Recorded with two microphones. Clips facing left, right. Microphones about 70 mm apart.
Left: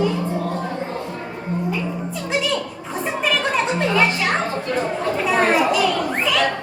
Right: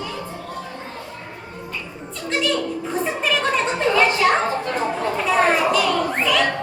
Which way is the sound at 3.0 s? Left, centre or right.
Centre.